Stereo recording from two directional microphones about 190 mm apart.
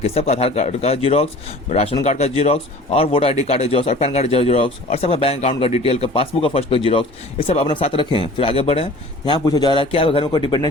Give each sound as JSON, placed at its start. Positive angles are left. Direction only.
{"t": 0.0, "sound": "speech", "side_deg": 35}